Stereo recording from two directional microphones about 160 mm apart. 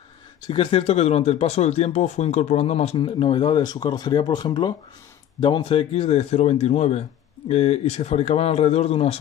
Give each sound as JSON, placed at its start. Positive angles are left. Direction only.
{"t": 0.4, "sound": "speech", "side_deg": 35}